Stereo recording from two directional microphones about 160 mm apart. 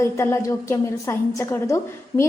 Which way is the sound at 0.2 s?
15° left (ahead or behind).